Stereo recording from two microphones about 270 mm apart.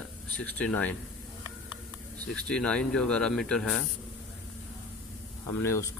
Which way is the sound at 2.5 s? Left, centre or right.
Centre.